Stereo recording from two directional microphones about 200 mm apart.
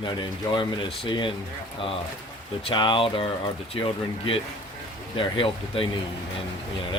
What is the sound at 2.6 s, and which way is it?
Speech, 25° left (ahead or behind).